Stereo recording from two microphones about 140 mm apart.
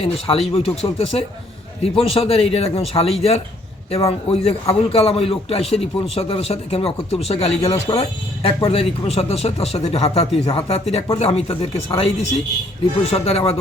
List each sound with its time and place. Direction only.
0.0 s a man's voice: 45° left (ahead or behind)